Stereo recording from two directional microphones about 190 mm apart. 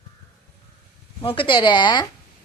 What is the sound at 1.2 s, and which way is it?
Speech, 25° left (ahead or behind).